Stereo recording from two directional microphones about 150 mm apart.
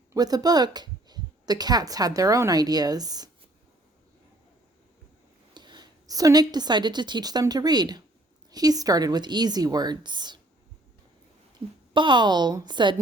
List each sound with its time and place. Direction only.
0.1 s speech: 25° right (ahead or behind)
5.5 s a woman's voice: 30° right (ahead or behind)
11.9 s a woman's voice: 30° right (ahead or behind)